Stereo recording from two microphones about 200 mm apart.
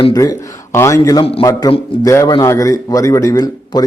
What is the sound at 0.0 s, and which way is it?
A man's voice, 20° left (ahead or behind).